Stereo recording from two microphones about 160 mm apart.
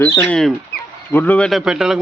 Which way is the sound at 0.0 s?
10° left (ahead or behind).